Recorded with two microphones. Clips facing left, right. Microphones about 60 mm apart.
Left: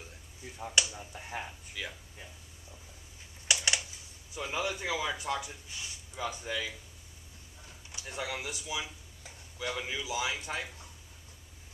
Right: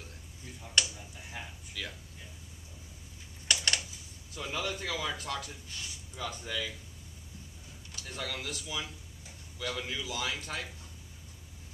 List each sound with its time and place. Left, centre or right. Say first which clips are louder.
0.8 s a man's voice: right 1 dB; centre
3.4 s typing: even; centre
4.3 s a man's voice: left 2 dB; centre
7.9 s a man's voice: left 2 dB; centre